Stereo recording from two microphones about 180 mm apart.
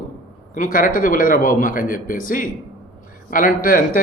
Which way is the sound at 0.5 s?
50° left (ahead or behind).